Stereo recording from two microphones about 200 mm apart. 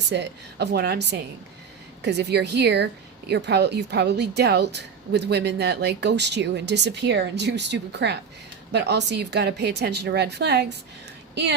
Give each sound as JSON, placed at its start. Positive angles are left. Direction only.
{"t": 0.1, "sound": "a woman's voice", "side_deg": -60}